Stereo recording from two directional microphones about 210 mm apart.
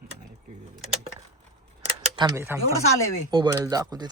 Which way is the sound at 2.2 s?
15° right (ahead or behind).